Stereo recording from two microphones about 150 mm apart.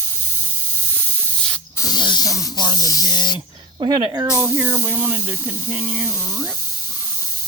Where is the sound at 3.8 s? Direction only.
35° right (ahead or behind).